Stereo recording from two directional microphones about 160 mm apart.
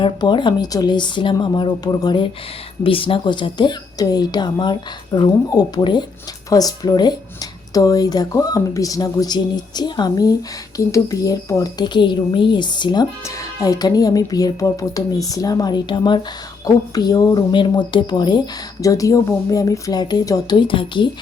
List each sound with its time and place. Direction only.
0.0 s speech: 30° left (ahead or behind)